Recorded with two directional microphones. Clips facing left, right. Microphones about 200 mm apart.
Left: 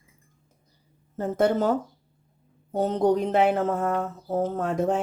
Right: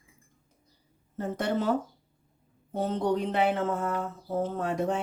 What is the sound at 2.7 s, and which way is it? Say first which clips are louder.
Mantra: left 5 dB; 40° left (ahead or behind).